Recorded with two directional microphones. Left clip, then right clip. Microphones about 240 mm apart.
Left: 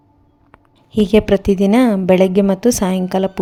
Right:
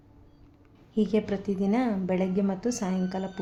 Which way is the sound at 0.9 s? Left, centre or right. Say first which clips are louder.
Left 14 dB; left.